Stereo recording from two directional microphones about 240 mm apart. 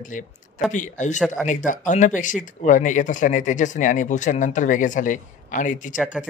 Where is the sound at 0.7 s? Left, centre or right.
Left.